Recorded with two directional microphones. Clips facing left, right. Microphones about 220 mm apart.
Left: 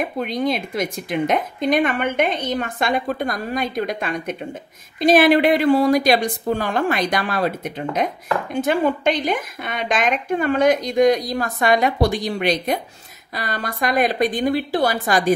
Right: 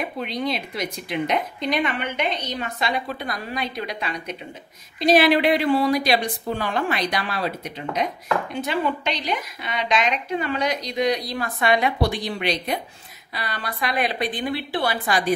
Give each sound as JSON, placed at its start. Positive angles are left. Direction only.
{"t": 0.0, "sound": "a woman's voice", "side_deg": 45}